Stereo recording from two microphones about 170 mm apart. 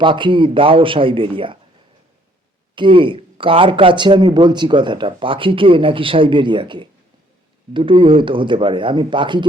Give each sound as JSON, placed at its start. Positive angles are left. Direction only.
{"t": 0.0, "sound": "a man's voice", "side_deg": -30}
{"t": 2.7, "sound": "speech", "side_deg": -30}